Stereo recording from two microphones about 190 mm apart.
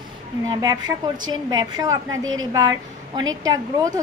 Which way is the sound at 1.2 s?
20° right (ahead or behind).